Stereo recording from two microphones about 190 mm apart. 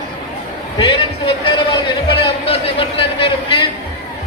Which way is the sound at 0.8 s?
25° left (ahead or behind).